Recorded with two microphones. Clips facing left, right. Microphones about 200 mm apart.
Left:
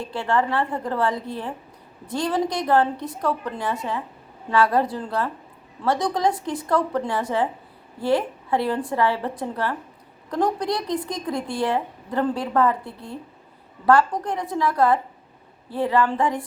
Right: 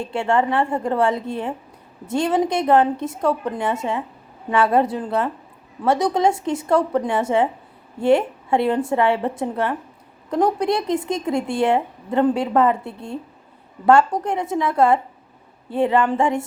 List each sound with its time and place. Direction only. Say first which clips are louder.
0.0 s speech: right 3 dB; 25° right (ahead or behind)